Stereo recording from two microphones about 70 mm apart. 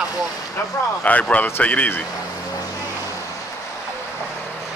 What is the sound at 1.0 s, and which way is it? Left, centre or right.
Speech, left.